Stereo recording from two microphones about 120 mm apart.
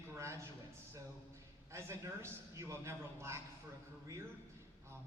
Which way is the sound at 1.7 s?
25° right (ahead or behind).